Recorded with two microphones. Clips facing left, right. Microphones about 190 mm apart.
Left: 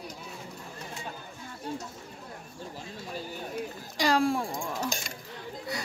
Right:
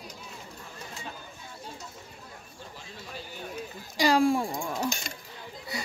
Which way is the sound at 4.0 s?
Centre (ahead or behind).